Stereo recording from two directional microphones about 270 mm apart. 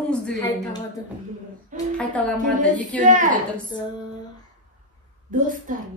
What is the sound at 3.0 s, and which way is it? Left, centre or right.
Speech, right.